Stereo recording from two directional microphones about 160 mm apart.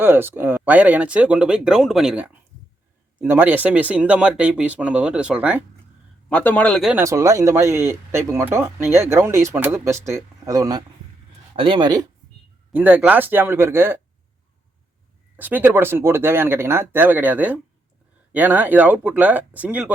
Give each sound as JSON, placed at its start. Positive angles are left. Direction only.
{"t": 0.0, "sound": "speech", "side_deg": -15}
{"t": 6.2, "sound": "a man's voice", "side_deg": 10}
{"t": 7.0, "sound": "speech", "side_deg": -20}
{"t": 12.7, "sound": "speech", "side_deg": -10}
{"t": 15.4, "sound": "speech", "side_deg": -10}